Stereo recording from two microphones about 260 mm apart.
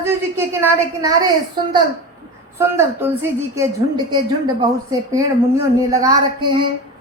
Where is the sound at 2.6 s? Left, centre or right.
Centre.